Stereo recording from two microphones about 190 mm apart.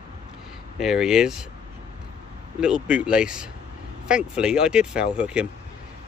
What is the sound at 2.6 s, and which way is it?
Speech, 5° right (ahead or behind).